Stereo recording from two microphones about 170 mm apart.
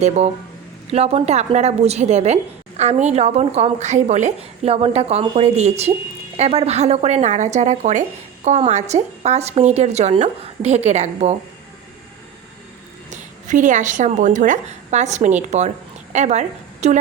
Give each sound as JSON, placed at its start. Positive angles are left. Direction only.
{"t": 0.9, "sound": "a woman's voice", "side_deg": -35}
{"t": 13.1, "sound": "a woman's voice", "side_deg": -45}